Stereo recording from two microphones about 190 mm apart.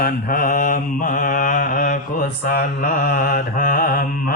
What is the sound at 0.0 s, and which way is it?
Mantra, 45° left (ahead or behind).